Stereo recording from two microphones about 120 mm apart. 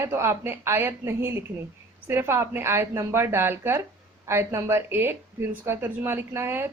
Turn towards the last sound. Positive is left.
turn(degrees=-20)  # may be behind; listen again after turning